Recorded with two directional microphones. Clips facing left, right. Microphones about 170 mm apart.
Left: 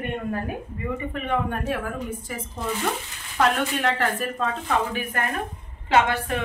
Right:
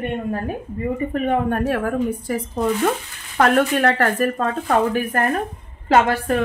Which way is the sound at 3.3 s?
55° right (ahead or behind).